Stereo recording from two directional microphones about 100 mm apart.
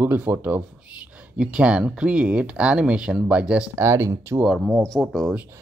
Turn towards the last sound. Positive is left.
turn(degrees=0)  # may be behind; listen again after turning